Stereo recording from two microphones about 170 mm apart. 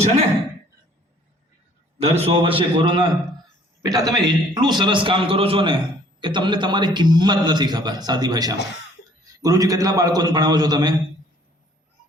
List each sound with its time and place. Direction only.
2.0 s a man's voice: 35° right (ahead or behind)